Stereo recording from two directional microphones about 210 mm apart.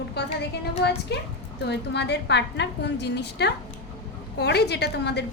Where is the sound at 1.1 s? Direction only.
55° left (ahead or behind).